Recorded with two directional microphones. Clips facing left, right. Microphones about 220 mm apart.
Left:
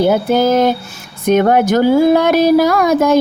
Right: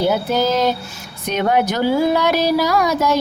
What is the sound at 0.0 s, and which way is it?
Speech, 50° left (ahead or behind).